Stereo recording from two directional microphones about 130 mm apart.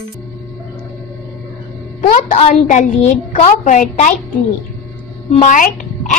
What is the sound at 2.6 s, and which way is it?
A child's voice, 70° left (ahead or behind).